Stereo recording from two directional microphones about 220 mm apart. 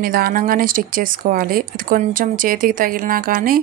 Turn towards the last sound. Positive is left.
turn(degrees=-40)  # may be behind; listen again after turning